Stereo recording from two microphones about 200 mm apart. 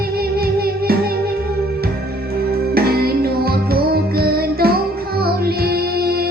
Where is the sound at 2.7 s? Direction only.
50° right (ahead or behind).